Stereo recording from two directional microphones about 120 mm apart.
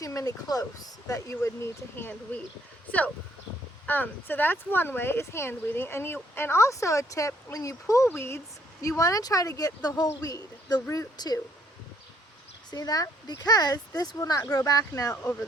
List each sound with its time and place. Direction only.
0.0 s speech: 25° left (ahead or behind)
3.8 s speech: 15° left (ahead or behind); by 11.3 s 30° left (ahead or behind)
12.7 s speech: 30° left (ahead or behind)
15.1 s speech: 20° left (ahead or behind)